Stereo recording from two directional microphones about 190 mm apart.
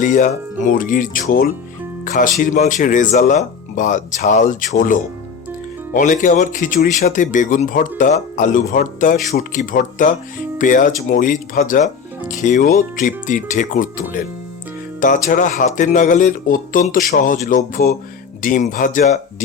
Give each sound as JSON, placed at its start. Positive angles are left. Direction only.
{"t": 0.0, "sound": "speech", "side_deg": 45}
{"t": 15.0, "sound": "speech", "side_deg": 45}